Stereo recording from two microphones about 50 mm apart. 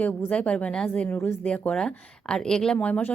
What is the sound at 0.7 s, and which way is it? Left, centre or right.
Speech, centre.